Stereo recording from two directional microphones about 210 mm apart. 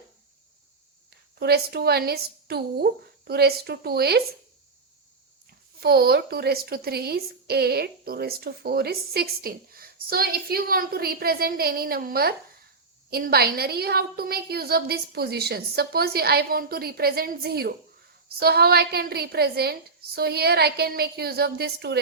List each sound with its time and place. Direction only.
1.4 s a woman's voice: 50° right (ahead or behind)
5.8 s a woman's voice: 45° right (ahead or behind)